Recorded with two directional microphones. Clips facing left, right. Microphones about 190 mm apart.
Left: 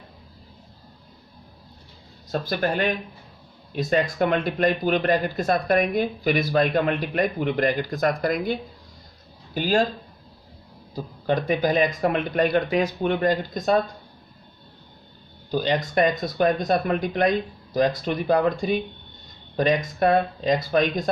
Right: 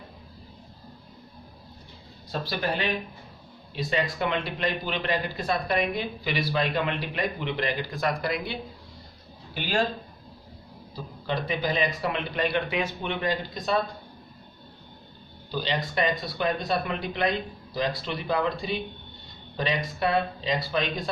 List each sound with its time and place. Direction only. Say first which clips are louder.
2.3 s speech: left 5 dB; 45° left (ahead or behind)
9.6 s speech: left 6 dB; 40° left (ahead or behind)
10.9 s speech: left 7 dB; 50° left (ahead or behind)
15.4 s speech: left 6 dB; 45° left (ahead or behind)